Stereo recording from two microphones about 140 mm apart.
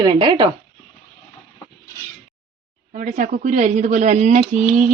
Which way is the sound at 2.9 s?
65° right (ahead or behind).